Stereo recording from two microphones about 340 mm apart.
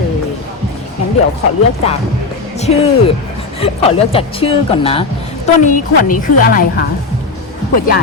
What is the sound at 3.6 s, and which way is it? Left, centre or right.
A woman's voice, centre.